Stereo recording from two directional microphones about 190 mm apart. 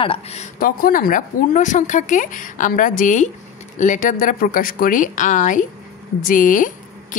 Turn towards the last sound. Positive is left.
turn(degrees=45)  # may be behind; listen again after turning